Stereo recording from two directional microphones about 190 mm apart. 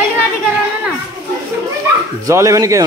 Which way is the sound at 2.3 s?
15° right (ahead or behind).